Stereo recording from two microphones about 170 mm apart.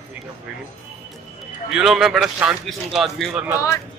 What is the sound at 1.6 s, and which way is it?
A man's voice, centre (ahead or behind).